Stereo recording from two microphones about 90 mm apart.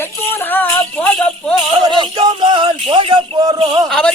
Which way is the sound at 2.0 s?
60° right (ahead or behind).